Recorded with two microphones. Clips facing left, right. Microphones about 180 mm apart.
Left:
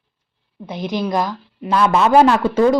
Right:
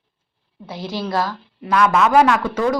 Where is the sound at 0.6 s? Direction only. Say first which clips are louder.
Left 4 dB; 20° left (ahead or behind).